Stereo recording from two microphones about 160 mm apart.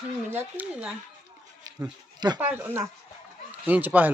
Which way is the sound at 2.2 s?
25° right (ahead or behind).